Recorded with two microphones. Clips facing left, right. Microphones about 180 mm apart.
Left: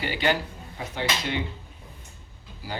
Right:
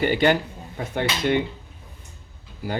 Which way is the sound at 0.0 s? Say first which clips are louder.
Right 6 dB; 50° right (ahead or behind).